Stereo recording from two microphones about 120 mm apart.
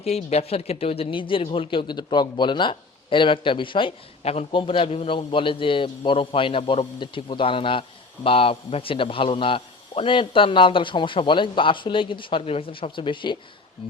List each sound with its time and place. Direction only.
0.0 s a man's voice: 60° left (ahead or behind); by 3.9 s 45° left (ahead or behind)
4.2 s a man's voice: 60° left (ahead or behind)
7.0 s a man's voice: 45° left (ahead or behind)